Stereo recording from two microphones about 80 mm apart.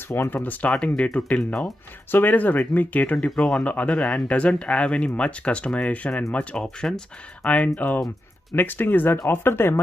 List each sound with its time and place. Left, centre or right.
0.1 s speech: left
0.7 s speech: centre
2.0 s speech: left
3.3 s speech: centre
3.6 s speech: centre